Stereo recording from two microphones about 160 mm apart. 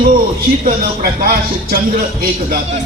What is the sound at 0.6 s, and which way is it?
Speech, 65° right (ahead or behind).